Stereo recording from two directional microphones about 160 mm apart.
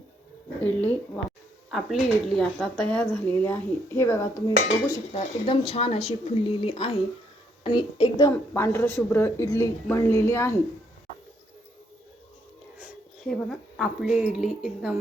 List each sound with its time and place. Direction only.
0.6 s a woman's voice: 10° left (ahead or behind)
5.1 s speech: 35° left (ahead or behind)
8.5 s a woman's voice: 15° left (ahead or behind)
12.8 s a woman's voice: centre (ahead or behind)